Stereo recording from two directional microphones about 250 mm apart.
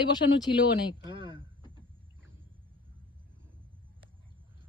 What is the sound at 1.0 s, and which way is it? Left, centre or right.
Speech, centre.